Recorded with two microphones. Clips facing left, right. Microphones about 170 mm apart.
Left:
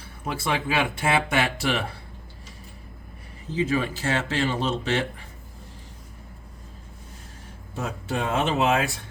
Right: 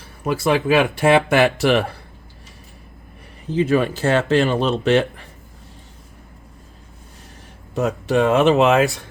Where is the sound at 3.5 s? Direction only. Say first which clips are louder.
Right 7 dB; 65° right (ahead or behind).